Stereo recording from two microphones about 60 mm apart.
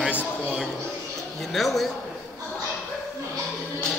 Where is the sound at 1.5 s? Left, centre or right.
Centre.